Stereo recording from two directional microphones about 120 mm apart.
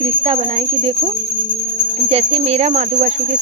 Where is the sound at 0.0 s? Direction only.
50° right (ahead or behind).